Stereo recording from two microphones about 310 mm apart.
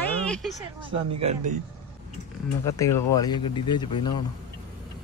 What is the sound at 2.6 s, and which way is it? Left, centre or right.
Speech, centre.